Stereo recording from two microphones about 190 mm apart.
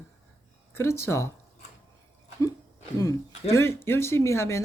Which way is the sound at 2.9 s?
15° left (ahead or behind).